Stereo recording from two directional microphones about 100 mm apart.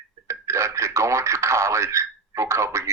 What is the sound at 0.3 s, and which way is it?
Speech, 30° right (ahead or behind).